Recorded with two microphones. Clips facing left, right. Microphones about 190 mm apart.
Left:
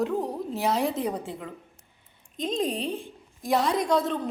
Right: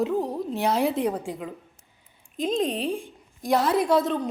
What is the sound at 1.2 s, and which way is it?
Speech, 15° right (ahead or behind).